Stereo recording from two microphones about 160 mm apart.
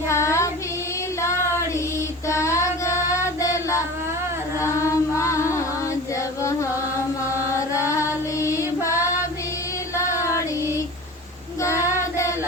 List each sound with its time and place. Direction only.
0.1 s child singing: 15° left (ahead or behind)
2.2 s female singing: 15° left (ahead or behind)
4.6 s chant: 20° left (ahead or behind)
7.3 s music: 20° left (ahead or behind)
10.0 s a sound: 20° left (ahead or behind)